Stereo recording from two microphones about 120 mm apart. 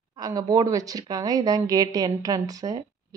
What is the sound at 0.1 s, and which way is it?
A woman's voice, 30° right (ahead or behind).